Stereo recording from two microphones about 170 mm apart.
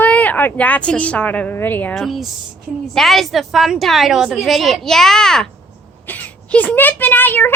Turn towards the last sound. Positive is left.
turn(degrees=10)  # may be behind; listen again after turning